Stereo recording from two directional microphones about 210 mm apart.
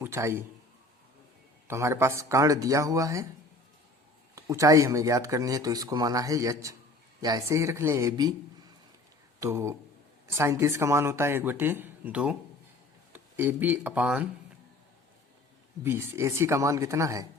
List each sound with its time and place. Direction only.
0.0 s a man's voice: 15° right (ahead or behind)
1.6 s speech: 15° right (ahead or behind)
4.4 s speech: 15° right (ahead or behind)
9.4 s speech: 15° right (ahead or behind)
15.8 s speech: 10° right (ahead or behind)